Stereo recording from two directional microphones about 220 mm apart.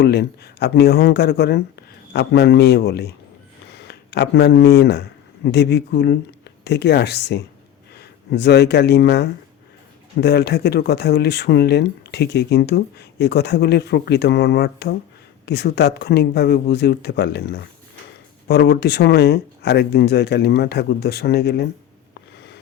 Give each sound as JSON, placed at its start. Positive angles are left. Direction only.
{"t": 0.0, "sound": "speech", "side_deg": 45}